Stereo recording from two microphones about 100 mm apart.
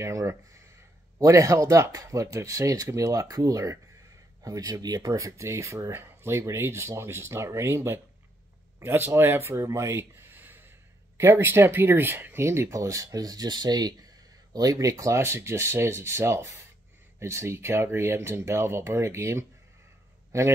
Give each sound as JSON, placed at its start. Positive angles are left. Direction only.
{"t": 0.0, "sound": "a man's voice", "side_deg": -30}